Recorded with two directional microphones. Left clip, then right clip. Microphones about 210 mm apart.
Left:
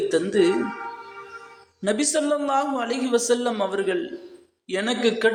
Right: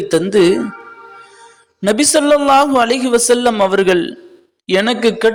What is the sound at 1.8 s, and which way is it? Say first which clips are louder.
A man's voice: right 10 dB; 40° right (ahead or behind).